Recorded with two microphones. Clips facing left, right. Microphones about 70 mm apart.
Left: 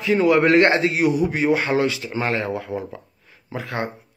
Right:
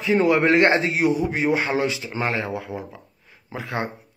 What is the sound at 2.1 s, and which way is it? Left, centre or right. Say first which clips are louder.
A man's voice: left 2 dB; centre.